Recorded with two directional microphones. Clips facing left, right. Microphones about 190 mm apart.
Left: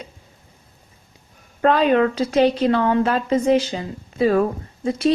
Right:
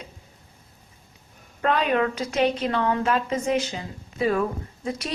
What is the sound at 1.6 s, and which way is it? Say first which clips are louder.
A woman's voice: left 6 dB; 30° left (ahead or behind).